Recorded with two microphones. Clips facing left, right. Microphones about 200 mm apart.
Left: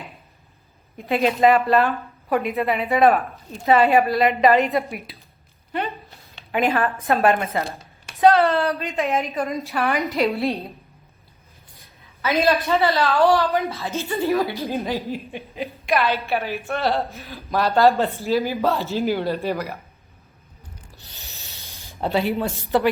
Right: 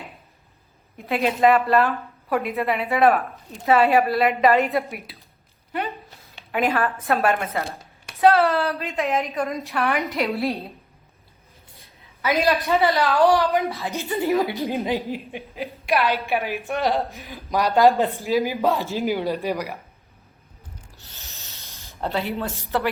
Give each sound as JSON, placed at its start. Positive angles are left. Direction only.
{"t": 0.9, "sound": "a woman's voice", "side_deg": 0}
{"t": 6.5, "sound": "a woman's voice", "side_deg": 0}
{"t": 12.2, "sound": "speech", "side_deg": -15}
{"t": 15.5, "sound": "a woman's voice", "side_deg": 0}
{"t": 16.0, "sound": "speech", "side_deg": -15}
{"t": 21.0, "sound": "a sound", "side_deg": 15}
{"t": 22.4, "sound": "speech", "side_deg": 15}